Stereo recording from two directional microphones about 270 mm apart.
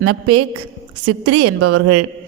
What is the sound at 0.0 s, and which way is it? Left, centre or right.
A woman's voice, right.